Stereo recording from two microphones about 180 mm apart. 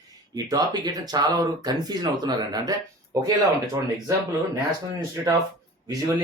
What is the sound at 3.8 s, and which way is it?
Speech, 15° right (ahead or behind).